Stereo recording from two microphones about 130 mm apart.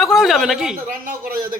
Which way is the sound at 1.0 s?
90° right.